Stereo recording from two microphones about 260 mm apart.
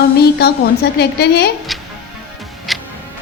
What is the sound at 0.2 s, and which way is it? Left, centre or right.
A woman's voice, left.